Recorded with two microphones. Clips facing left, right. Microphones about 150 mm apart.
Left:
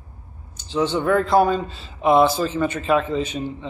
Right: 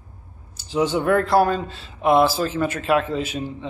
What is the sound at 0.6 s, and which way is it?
A man's voice, 10° right (ahead or behind).